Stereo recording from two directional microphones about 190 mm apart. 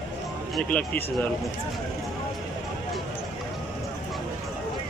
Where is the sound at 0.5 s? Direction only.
5° left (ahead or behind).